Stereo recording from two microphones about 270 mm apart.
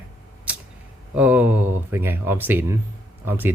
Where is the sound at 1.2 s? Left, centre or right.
Centre.